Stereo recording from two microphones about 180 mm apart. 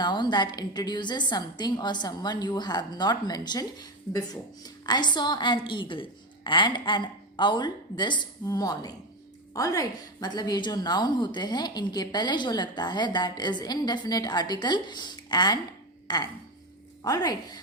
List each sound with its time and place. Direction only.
0.0 s a woman's voice: 25° left (ahead or behind)